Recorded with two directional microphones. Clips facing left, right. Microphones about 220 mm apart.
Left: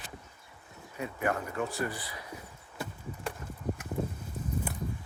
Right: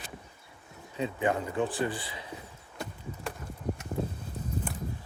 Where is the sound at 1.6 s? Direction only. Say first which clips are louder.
Right 4 dB; 30° right (ahead or behind).